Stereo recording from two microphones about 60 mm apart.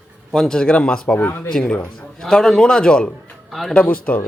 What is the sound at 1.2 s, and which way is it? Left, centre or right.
Speech, left.